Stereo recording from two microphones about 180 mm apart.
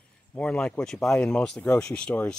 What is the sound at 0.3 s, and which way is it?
Speech, 5° left (ahead or behind).